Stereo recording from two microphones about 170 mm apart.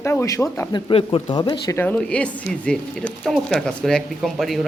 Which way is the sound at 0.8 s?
30° left (ahead or behind).